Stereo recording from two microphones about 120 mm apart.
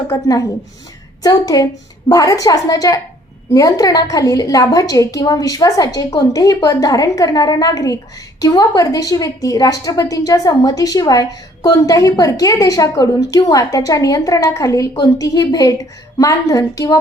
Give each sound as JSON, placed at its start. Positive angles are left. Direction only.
{"t": 0.1, "sound": "a woman's voice", "side_deg": 30}